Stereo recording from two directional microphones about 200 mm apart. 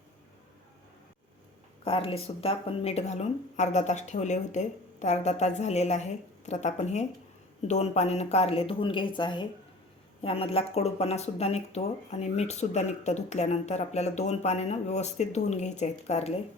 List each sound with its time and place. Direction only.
1.8 s speech: 25° left (ahead or behind)